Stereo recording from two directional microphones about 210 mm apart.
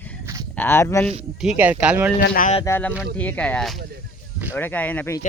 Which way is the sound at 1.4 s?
5° right (ahead or behind).